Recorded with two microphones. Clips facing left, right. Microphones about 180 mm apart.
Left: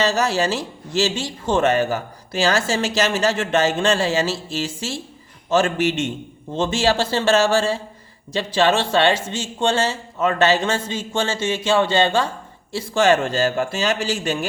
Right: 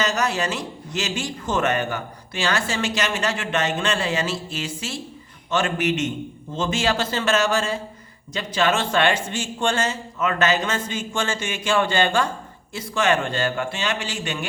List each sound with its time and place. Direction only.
0.0 s speech: 30° left (ahead or behind)